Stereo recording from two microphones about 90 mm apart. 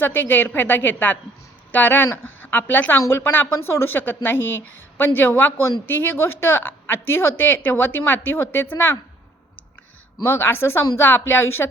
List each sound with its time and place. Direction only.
0.0 s a woman's voice: 25° left (ahead or behind)
10.2 s a woman's voice: 25° left (ahead or behind)